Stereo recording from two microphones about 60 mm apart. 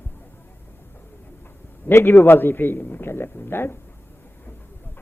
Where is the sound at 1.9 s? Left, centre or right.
Left.